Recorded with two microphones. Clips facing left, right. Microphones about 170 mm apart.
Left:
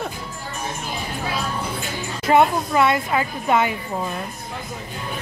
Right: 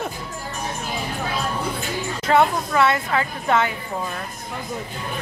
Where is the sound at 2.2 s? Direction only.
15° left (ahead or behind).